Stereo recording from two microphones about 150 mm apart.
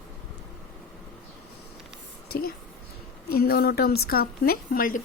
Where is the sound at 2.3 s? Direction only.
90° left.